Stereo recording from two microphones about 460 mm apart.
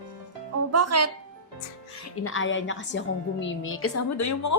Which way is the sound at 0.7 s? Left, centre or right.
Right.